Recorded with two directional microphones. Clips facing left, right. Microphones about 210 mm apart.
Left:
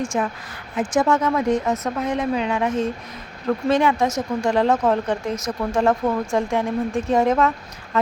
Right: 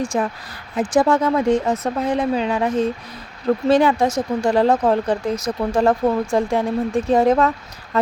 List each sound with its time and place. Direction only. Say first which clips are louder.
0.0 s speech: right 2 dB; 35° right (ahead or behind)